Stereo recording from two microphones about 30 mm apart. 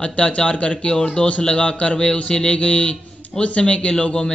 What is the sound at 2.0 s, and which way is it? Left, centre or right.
Speech, left.